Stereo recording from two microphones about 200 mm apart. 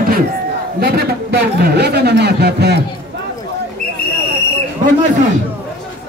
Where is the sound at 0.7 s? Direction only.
50° right (ahead or behind).